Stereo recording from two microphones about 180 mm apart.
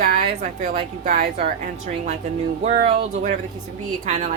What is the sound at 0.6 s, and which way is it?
A woman's voice, 40° right (ahead or behind).